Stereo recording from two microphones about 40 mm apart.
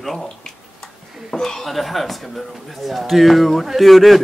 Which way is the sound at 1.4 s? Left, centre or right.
Centre.